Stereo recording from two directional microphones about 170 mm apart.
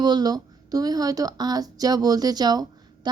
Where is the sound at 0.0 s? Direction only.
25° right (ahead or behind).